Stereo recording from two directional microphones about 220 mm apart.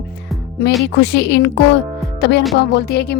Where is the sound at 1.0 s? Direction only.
50° left (ahead or behind).